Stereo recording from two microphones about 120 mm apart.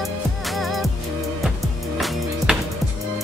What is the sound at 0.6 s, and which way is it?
Music, centre (ahead or behind).